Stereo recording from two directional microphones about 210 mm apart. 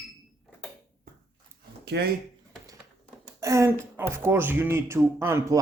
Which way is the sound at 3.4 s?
15° right (ahead or behind).